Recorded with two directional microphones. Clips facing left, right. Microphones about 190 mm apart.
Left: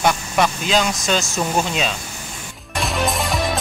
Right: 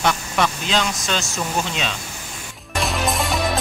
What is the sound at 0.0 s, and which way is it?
Speech, 10° left (ahead or behind).